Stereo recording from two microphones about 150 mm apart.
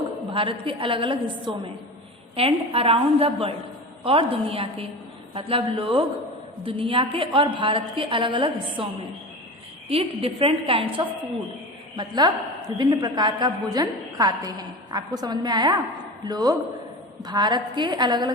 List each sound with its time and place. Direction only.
0.3 s a woman's voice: 35° right (ahead or behind)
9.9 s a woman's voice: 40° right (ahead or behind)
11.9 s a woman's voice: 25° right (ahead or behind)